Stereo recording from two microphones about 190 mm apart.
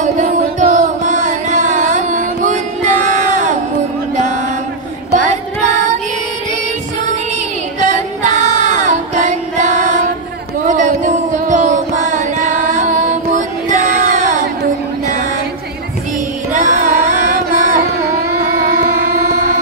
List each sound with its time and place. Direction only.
0.0 s music: 40° right (ahead or behind)
7.8 s music: 40° right (ahead or behind)
16.5 s carnatic music: 40° right (ahead or behind)
18.9 s music: 40° right (ahead or behind)